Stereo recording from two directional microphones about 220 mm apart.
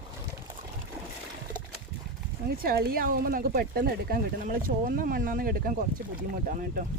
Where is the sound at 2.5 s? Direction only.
45° right (ahead or behind).